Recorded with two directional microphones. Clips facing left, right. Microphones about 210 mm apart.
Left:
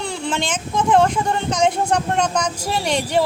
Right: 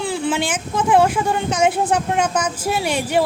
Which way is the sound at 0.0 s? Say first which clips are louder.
Right 3 dB; 5° right (ahead or behind).